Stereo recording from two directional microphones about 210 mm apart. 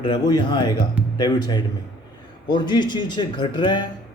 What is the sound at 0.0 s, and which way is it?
A man's voice, 20° left (ahead or behind).